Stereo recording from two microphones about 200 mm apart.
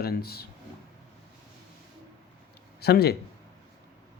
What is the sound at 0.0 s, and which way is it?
Speech, 50° left (ahead or behind).